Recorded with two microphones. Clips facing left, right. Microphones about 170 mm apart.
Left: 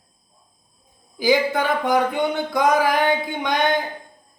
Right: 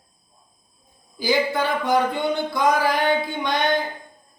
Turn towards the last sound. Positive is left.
turn(degrees=15)  # may be behind; listen again after turning